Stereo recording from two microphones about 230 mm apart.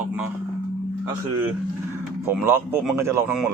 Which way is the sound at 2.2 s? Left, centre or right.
Centre.